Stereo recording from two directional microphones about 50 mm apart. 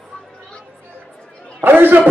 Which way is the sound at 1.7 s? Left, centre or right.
Right.